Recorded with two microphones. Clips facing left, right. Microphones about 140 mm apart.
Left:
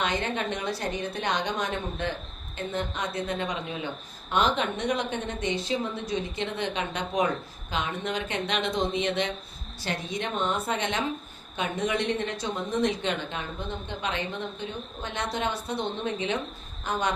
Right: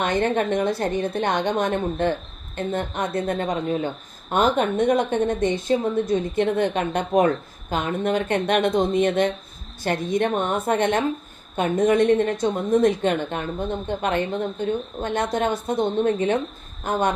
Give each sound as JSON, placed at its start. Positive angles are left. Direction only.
{"t": 0.0, "sound": "a woman's voice", "side_deg": -50}